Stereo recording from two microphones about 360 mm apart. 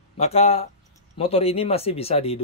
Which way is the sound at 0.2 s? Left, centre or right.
Centre.